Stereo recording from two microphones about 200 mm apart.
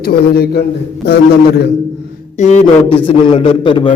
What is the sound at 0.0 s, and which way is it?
A man's voice, 50° left (ahead or behind).